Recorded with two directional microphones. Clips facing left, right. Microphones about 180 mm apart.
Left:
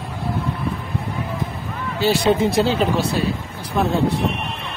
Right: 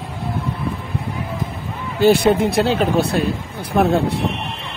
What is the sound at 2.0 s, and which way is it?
Speech, 55° right (ahead or behind).